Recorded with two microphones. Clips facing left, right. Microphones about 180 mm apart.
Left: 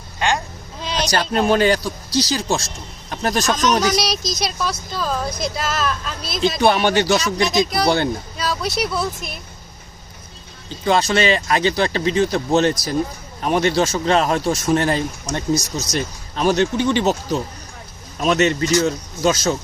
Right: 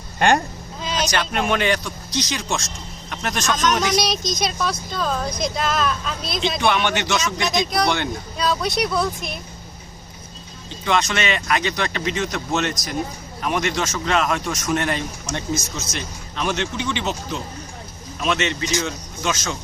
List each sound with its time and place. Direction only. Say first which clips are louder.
0.2 s speech: right 4 dB; 55° right (ahead or behind)
0.9 s speech: left 3 dB; 35° left (ahead or behind)
3.5 s a woman's voice: left 1 dB; centre (ahead or behind)
6.6 s speech: left 5 dB; 40° left (ahead or behind)
7.4 s a woman's voice: left 3 dB; centre (ahead or behind)
7.9 s speech: left 5 dB; 35° left (ahead or behind)
8.4 s a woman's voice: right 3 dB; 5° left (ahead or behind)
10.8 s speech: left 5 dB; 35° left (ahead or behind)